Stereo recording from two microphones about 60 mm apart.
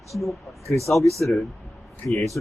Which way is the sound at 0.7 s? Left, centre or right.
Left.